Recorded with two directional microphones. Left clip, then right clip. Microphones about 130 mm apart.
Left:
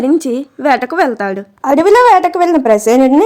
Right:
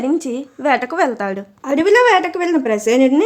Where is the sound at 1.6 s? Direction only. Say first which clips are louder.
Left 5 dB; 55° left (ahead or behind).